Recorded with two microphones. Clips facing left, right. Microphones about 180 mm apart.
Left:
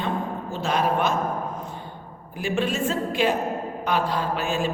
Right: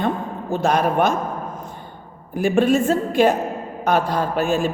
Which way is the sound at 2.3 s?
50° right (ahead or behind).